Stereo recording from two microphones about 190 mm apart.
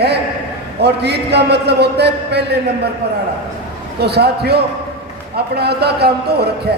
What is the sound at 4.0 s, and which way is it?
A man's voice, 60° right (ahead or behind).